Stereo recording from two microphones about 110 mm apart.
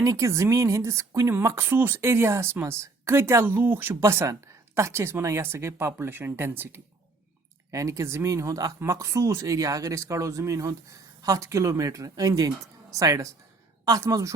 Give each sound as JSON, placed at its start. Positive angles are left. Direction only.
{"t": 0.0, "sound": "speech", "side_deg": -30}